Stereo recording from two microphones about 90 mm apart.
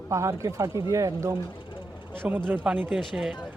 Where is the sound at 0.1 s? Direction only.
35° right (ahead or behind).